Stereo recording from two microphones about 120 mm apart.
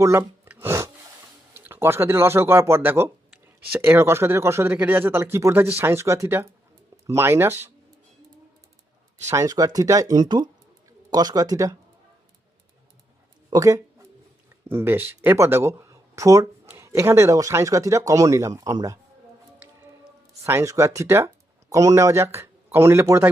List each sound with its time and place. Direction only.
0.0 s a sound: 25° right (ahead or behind)
1.5 s speech: 20° right (ahead or behind)
9.3 s speech: 30° right (ahead or behind)
13.5 s speech: 30° right (ahead or behind)
14.7 s speech: 20° right (ahead or behind)
20.4 s speech: 25° right (ahead or behind)